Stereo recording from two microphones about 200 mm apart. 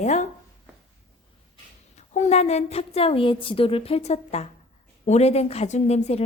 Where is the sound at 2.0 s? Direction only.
35° left (ahead or behind).